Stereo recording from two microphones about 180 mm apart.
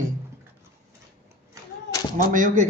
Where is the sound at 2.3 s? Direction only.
45° right (ahead or behind).